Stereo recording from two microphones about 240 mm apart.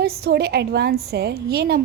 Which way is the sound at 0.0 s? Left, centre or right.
Right.